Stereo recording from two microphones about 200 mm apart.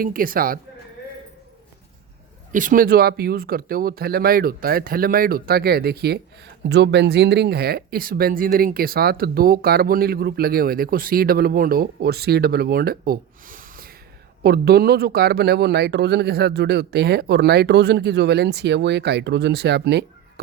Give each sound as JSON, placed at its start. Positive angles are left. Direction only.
{"t": 0.0, "sound": "speech", "side_deg": -45}
{"t": 2.5, "sound": "speech", "side_deg": -40}